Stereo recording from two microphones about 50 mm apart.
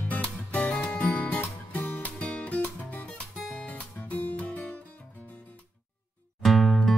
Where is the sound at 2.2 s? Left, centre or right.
Left.